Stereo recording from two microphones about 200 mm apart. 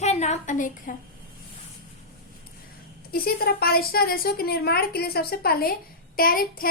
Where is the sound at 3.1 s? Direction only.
50° left (ahead or behind).